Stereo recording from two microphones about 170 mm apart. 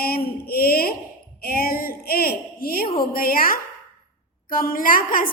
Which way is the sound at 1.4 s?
60° left (ahead or behind).